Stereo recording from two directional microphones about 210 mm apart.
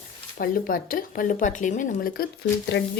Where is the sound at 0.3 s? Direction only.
45° left (ahead or behind).